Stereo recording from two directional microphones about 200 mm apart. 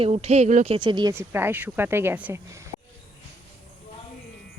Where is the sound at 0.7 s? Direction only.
20° right (ahead or behind).